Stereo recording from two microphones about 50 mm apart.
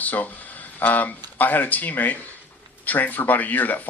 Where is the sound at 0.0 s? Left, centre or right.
Left.